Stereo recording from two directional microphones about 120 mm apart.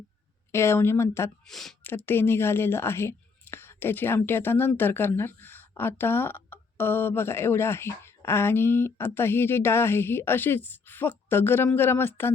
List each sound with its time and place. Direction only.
0.5 s speech: 20° left (ahead or behind)
1.5 s speech: centre (ahead or behind)
2.0 s speech: 20° left (ahead or behind)